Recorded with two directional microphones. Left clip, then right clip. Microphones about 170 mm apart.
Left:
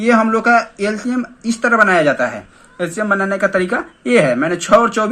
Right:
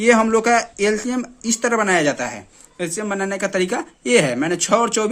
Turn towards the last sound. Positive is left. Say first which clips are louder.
# left 5 dB
turn(degrees=-40)  # may be behind; listen again after turning